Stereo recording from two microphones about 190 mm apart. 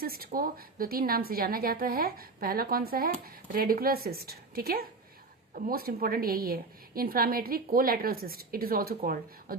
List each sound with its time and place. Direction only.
0.0 s a woman's voice: 50° right (ahead or behind)